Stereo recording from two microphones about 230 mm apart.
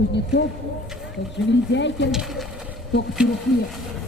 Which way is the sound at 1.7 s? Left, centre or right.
Left.